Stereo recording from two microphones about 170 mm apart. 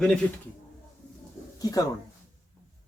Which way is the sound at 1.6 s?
20° left (ahead or behind).